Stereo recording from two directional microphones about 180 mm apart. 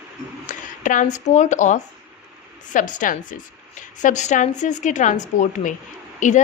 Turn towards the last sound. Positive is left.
turn(degrees=45)  # may be behind; listen again after turning